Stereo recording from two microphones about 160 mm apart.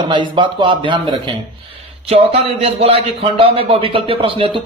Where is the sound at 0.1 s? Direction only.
30° right (ahead or behind).